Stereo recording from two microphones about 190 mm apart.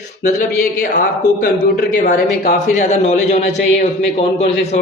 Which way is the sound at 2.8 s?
35° left (ahead or behind).